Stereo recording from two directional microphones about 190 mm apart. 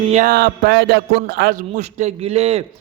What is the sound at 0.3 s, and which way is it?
Speech, 55° right (ahead or behind).